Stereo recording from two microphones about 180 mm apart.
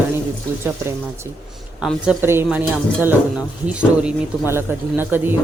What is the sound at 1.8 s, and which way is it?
A woman's voice, 10° right (ahead or behind).